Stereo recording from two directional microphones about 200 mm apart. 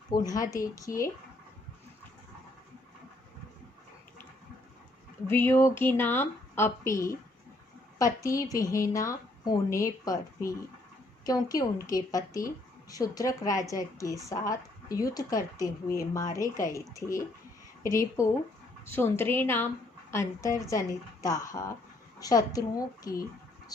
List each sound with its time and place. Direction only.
0.1 s a woman's voice: 20° left (ahead or behind)
5.3 s a woman's voice: 10° left (ahead or behind)
18.9 s a woman's voice: 10° left (ahead or behind)